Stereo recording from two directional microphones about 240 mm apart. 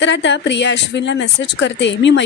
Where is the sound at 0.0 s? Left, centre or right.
Left.